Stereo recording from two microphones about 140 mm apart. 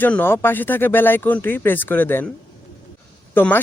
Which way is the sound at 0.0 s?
15° left (ahead or behind).